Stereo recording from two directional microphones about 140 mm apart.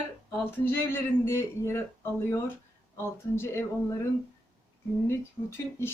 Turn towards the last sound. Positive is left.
turn(degrees=15)  # may be behind; listen again after turning